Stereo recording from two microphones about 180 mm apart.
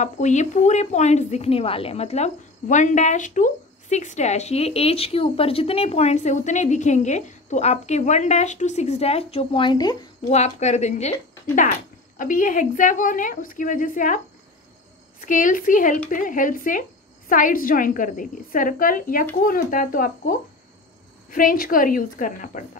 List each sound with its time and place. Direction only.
0.0 s speech: 40° left (ahead or behind); by 9.9 s 25° left (ahead or behind)
10.2 s speech: 40° left (ahead or behind)
12.2 s a woman's voice: 50° left (ahead or behind)